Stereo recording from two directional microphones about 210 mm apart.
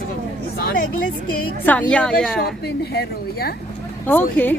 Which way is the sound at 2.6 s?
50° left (ahead or behind).